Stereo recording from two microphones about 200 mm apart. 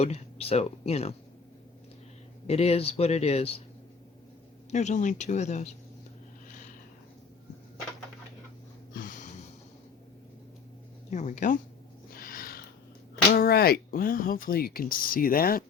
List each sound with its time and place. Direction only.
0.0 s speech: 30° left (ahead or behind)
2.5 s speech: 30° left (ahead or behind)
4.7 s speech: 35° left (ahead or behind)
8.9 s a sound: 40° left (ahead or behind)
11.1 s speech: 35° left (ahead or behind)
12.1 s a sound: 45° left (ahead or behind)
13.3 s speech: 50° left (ahead or behind)